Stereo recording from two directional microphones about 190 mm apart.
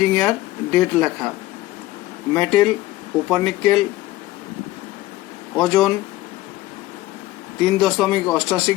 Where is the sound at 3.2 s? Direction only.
Centre (ahead or behind).